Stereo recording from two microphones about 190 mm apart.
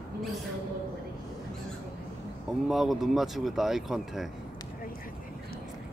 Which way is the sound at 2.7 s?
Centre (ahead or behind).